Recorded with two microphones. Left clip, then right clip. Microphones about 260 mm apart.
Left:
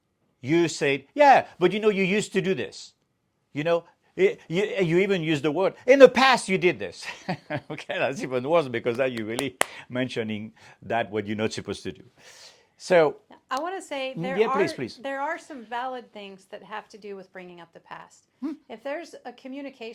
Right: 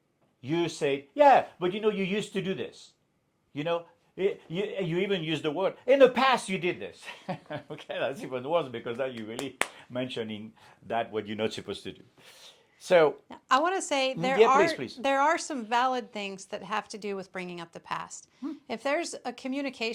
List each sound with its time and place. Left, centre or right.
0.4 s a man's voice: left
1.5 s a man's voice: left
13.2 s a woman's voice: right
14.6 s speech: left
15.0 s a woman's voice: right